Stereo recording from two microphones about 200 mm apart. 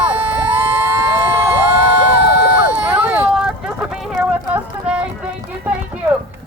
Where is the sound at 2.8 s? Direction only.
5° right (ahead or behind).